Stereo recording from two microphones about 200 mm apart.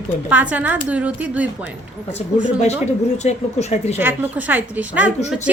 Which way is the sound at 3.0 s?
35° left (ahead or behind).